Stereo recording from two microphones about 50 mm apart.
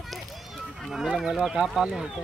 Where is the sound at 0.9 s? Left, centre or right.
Centre.